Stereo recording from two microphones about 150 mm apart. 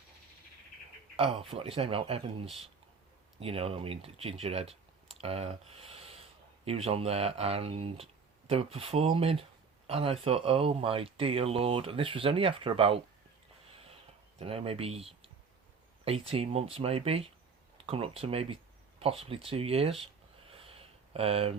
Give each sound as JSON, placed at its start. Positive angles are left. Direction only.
{"t": 1.1, "sound": "speech", "side_deg": -40}
{"t": 14.3, "sound": "speech", "side_deg": -40}
{"t": 20.5, "sound": "a sound", "side_deg": -40}